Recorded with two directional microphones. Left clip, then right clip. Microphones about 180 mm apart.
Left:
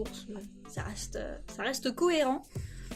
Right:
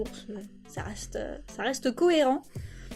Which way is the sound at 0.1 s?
20° right (ahead or behind).